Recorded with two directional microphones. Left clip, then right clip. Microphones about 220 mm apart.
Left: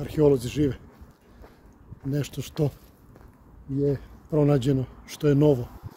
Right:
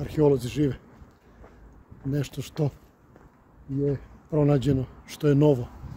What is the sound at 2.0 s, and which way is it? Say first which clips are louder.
Speech: even; centre (ahead or behind).